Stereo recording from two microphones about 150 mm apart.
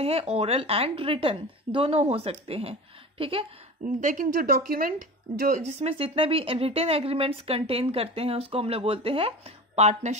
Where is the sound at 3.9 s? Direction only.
60° right (ahead or behind).